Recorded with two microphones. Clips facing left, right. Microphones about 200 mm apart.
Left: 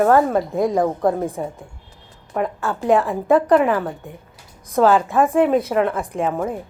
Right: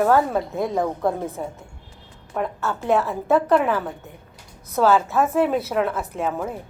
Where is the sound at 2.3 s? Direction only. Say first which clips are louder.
Left 3 dB; centre (ahead or behind).